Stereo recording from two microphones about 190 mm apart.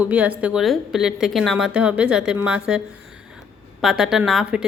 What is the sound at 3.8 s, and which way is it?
Speech, centre (ahead or behind).